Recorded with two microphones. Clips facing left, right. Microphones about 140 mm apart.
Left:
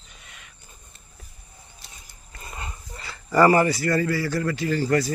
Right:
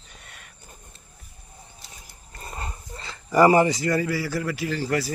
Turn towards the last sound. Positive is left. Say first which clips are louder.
# left 3 dB
turn(degrees=-5)  # may be behind; listen again after turning